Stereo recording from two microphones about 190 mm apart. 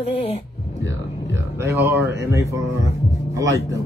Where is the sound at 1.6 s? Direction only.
10° right (ahead or behind).